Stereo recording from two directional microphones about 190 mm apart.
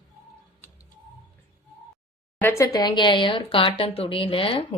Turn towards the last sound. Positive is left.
turn(degrees=30)  # may be behind; listen again after turning